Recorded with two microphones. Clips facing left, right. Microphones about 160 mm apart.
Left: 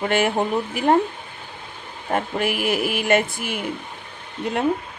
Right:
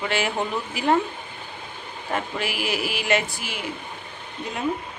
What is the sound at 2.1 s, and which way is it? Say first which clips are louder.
Speech: left 5 dB; 45° left (ahead or behind).